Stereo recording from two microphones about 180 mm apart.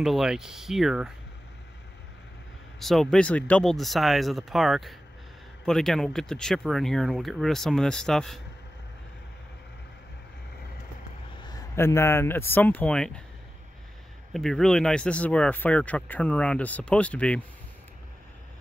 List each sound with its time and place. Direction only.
0.0 s speech: centre (ahead or behind)
2.8 s speech: centre (ahead or behind)
11.5 s speech: 15° left (ahead or behind)
14.3 s speech: centre (ahead or behind)